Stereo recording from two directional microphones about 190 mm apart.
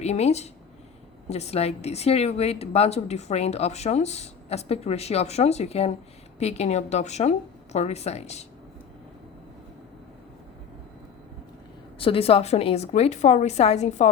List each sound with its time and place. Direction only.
0.0 s a woman's voice: 35° left (ahead or behind)
11.9 s a woman's voice: 30° left (ahead or behind)